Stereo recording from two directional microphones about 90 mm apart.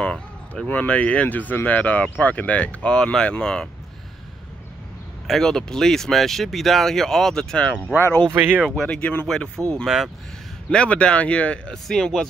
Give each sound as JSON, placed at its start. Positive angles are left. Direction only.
{"t": 0.0, "sound": "speech", "side_deg": 10}
{"t": 5.2, "sound": "speech", "side_deg": 5}
{"t": 8.4, "sound": "speech", "side_deg": -15}
{"t": 8.6, "sound": "speech", "side_deg": 5}
{"t": 9.8, "sound": "speech", "side_deg": -5}
{"t": 10.7, "sound": "speech", "side_deg": 10}